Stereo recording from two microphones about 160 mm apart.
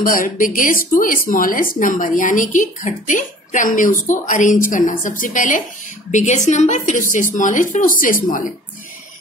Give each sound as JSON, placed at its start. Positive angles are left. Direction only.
{"t": 0.0, "sound": "a woman's voice", "side_deg": 60}